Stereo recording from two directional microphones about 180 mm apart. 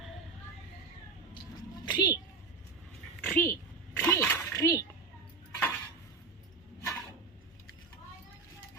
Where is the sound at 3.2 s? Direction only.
10° left (ahead or behind).